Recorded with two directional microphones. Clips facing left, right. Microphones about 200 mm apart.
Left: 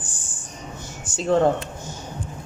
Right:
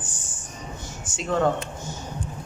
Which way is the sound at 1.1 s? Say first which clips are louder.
Left 4 dB; 30° left (ahead or behind).